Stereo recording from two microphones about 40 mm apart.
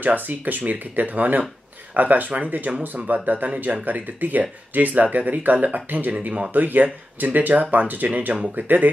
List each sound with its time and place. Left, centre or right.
0.0 s speech: right
3.4 s speech: right